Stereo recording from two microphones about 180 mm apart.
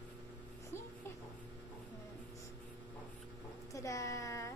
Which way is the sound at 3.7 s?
15° left (ahead or behind).